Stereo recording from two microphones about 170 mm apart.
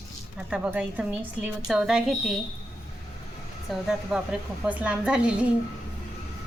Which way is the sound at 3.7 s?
5° right (ahead or behind).